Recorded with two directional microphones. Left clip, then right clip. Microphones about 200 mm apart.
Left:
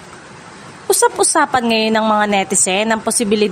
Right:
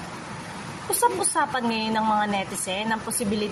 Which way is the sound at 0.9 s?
50° left (ahead or behind).